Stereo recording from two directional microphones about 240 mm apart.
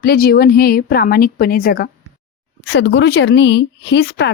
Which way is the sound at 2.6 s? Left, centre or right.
Left.